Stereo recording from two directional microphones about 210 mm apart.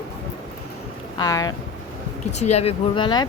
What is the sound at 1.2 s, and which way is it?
Speech, 15° left (ahead or behind).